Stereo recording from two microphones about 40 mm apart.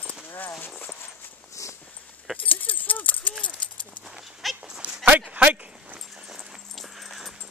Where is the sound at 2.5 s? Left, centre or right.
Left.